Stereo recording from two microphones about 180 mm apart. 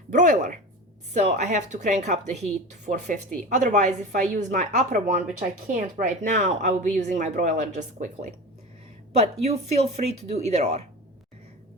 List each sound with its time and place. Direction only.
0.1 s speech: 45° right (ahead or behind)